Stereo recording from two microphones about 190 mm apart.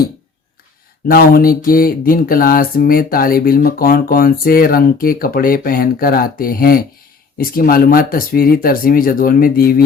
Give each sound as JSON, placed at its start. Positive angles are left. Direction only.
{"t": 1.0, "sound": "speech", "side_deg": 50}